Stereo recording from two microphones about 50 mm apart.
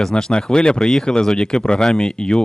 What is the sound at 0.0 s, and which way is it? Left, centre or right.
Speech, centre.